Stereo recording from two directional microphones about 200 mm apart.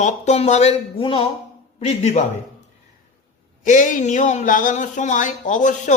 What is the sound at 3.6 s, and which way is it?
Speech, 40° left (ahead or behind).